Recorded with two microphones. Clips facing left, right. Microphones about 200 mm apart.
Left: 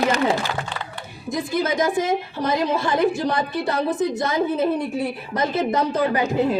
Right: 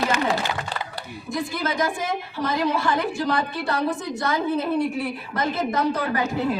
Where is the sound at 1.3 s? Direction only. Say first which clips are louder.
Left 4 dB; 20° left (ahead or behind).